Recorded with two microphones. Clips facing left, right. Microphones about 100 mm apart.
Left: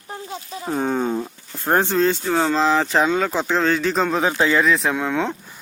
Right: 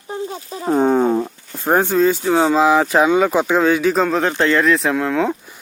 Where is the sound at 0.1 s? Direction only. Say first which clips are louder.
Right 5 dB; 30° right (ahead or behind).